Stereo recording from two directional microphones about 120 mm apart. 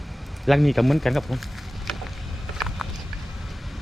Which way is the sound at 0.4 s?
Centre (ahead or behind).